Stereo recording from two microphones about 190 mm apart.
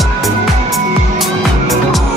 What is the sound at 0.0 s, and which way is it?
Music, centre (ahead or behind).